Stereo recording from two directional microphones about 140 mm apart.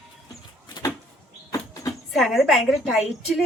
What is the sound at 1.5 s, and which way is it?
Vehicle, 25° left (ahead or behind).